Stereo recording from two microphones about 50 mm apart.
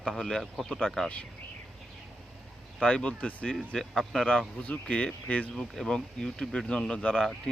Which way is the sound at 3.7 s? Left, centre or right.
Centre.